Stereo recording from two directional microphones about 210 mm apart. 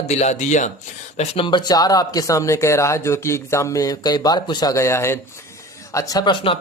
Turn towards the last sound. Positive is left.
turn(degrees=25)  # may be behind; listen again after turning